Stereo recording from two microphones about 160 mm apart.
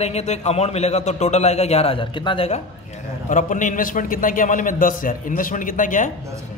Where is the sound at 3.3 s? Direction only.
55° left (ahead or behind).